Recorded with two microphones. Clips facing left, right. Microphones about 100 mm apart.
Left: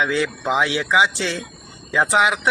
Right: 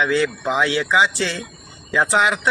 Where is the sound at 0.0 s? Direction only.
15° left (ahead or behind).